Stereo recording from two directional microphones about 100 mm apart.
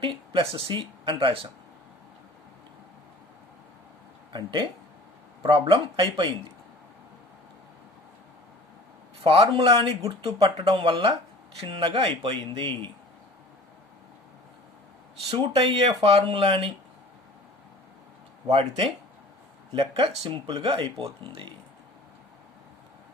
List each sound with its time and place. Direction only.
0.0 s speech: 60° right (ahead or behind)
4.3 s speech: 50° right (ahead or behind)
9.2 s speech: 65° right (ahead or behind)
10.0 s speech: 35° right (ahead or behind)
10.6 s speech: 65° right (ahead or behind)
11.6 s speech: 65° right (ahead or behind)
15.3 s speech: 80° right
16.0 s speech: 65° right (ahead or behind)
18.4 s speech: 85° right
19.7 s speech: 70° right (ahead or behind)
20.5 s speech: 45° right (ahead or behind)
20.8 s speech: 70° right (ahead or behind)